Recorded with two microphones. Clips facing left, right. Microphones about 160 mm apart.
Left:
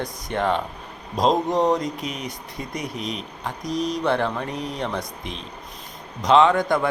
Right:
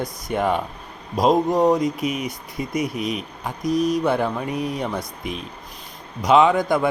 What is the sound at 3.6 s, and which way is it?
Speech, 50° right (ahead or behind).